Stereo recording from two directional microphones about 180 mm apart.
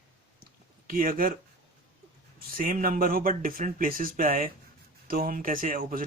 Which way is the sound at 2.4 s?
50° right (ahead or behind).